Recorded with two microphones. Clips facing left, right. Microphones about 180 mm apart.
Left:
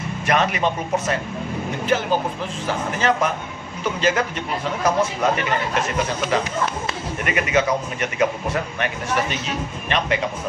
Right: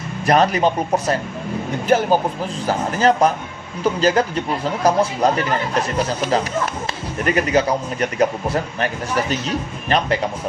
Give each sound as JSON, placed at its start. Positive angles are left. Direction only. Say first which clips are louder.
{"t": 0.3, "sound": "a man's voice", "louder": "right 5 dB", "side_deg": -35}
{"t": 7.2, "sound": "a man's voice", "louder": "right 3 dB", "side_deg": -35}